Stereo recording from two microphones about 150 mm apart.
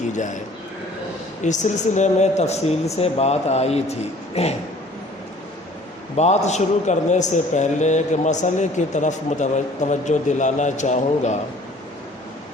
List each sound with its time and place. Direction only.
1.5 s a man's voice: 50° left (ahead or behind)
6.1 s a man's voice: 50° left (ahead or behind)